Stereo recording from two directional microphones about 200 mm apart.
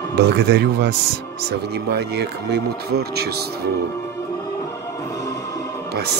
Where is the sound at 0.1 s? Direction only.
55° right (ahead or behind).